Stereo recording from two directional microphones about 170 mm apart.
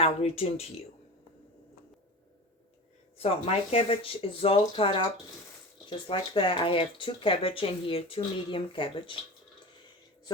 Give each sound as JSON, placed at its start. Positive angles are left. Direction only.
{"t": 0.0, "sound": "speech", "side_deg": 35}
{"t": 3.2, "sound": "speech", "side_deg": 35}